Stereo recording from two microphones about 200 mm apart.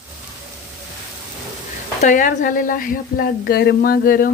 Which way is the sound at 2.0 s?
40° left (ahead or behind).